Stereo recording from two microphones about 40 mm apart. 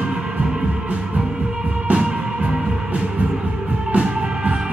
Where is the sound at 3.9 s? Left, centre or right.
Right.